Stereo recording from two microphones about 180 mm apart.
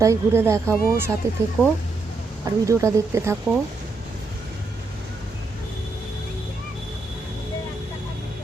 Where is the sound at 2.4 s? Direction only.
15° right (ahead or behind).